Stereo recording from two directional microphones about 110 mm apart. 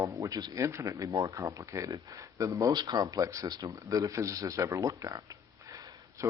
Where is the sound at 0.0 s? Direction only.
30° right (ahead or behind).